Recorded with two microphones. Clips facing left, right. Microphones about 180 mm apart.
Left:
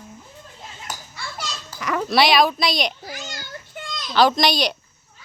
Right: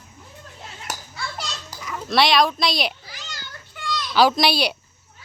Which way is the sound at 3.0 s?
45° left (ahead or behind).